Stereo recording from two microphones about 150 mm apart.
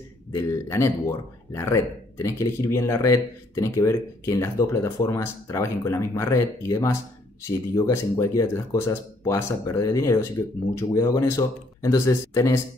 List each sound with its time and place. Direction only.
0.3 s a man's voice: 20° left (ahead or behind)